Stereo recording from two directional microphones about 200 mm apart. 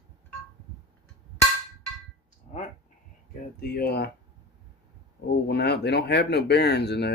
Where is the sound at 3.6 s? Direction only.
50° left (ahead or behind).